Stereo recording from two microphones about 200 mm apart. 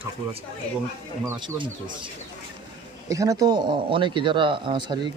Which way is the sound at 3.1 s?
15° right (ahead or behind).